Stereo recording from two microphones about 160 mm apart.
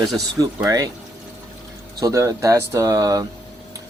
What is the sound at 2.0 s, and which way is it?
Speech, 20° right (ahead or behind).